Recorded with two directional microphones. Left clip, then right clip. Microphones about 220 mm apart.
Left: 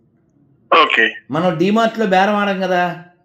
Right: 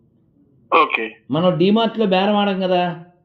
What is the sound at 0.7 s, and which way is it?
Speech, 20° left (ahead or behind).